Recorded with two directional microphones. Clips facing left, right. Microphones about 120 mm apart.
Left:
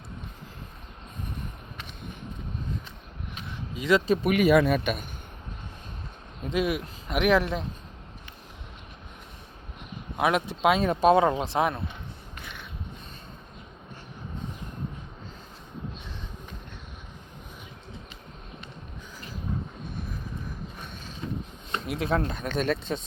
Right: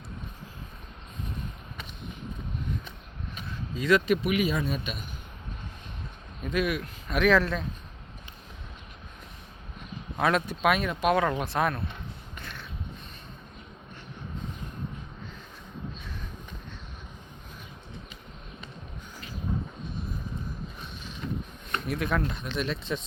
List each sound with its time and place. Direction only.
3.8 s speech: 25° left (ahead or behind)
4.2 s speech: 45° left (ahead or behind)
4.4 s speech: 70° left (ahead or behind); by 5.0 s 55° left (ahead or behind)
6.4 s speech: 25° left (ahead or behind)
10.2 s speech: 15° left (ahead or behind)
12.4 s a sound: 10° left (ahead or behind)
21.7 s a sound: 25° left (ahead or behind)
22.2 s speech: 45° left (ahead or behind)